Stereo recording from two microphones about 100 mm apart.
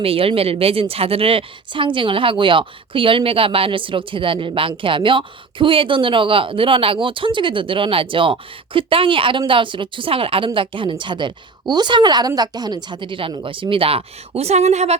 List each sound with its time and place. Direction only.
0.0 s a woman's voice: 70° right (ahead or behind); by 14.9 s 90° right